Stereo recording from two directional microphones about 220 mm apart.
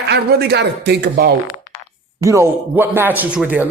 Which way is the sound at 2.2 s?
15° right (ahead or behind).